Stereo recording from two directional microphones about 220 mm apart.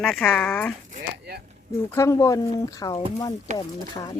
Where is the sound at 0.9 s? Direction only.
45° right (ahead or behind).